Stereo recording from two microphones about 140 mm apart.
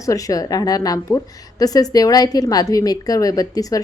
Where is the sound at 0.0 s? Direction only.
25° left (ahead or behind).